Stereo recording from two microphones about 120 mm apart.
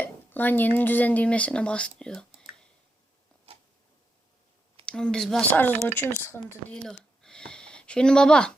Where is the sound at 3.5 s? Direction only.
55° right (ahead or behind).